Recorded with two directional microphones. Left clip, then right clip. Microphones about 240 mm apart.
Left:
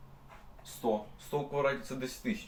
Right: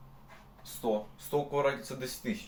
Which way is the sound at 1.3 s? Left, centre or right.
Centre.